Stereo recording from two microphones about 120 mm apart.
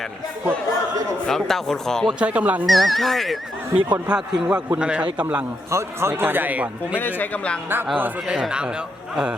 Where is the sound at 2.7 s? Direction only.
Centre (ahead or behind).